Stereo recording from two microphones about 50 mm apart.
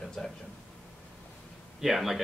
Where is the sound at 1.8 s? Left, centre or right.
Centre.